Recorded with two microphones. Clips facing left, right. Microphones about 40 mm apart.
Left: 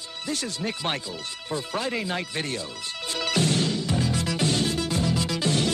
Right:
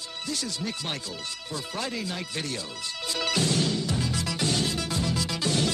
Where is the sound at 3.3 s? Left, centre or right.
Left.